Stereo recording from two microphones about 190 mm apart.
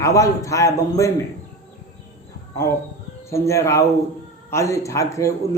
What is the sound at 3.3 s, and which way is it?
A man's voice, 15° left (ahead or behind).